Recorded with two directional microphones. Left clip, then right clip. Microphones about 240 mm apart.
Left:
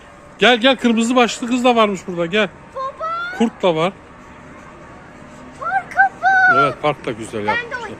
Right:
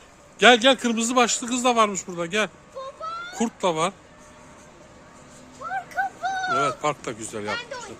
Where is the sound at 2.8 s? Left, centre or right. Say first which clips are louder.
Left 10 dB; right.